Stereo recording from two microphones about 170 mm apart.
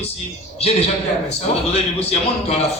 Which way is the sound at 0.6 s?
35° left (ahead or behind).